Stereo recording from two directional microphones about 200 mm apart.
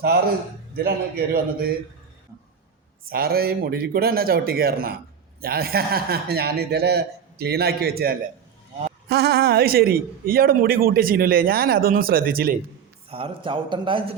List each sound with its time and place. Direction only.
0.9 s a man's voice: 50° right (ahead or behind)
3.1 s a man's voice: 50° right (ahead or behind)
13.1 s a man's voice: 25° right (ahead or behind)